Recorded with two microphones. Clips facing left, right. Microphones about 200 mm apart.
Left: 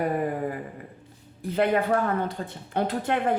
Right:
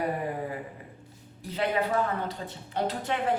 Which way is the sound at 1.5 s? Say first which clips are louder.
Left 5 dB; 55° left (ahead or behind).